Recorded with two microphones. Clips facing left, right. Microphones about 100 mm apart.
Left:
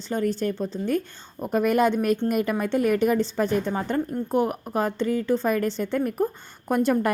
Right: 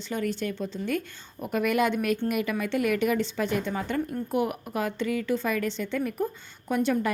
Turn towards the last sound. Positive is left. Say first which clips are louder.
# left 4 dB
turn(degrees=45)  # may be behind; listen again after turning